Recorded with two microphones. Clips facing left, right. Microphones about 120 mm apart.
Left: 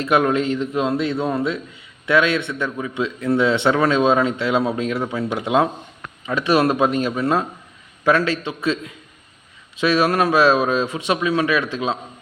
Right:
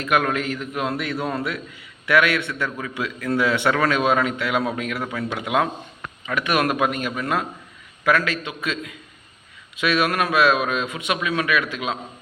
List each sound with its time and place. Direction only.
0.0 s a man's voice: 25° left (ahead or behind)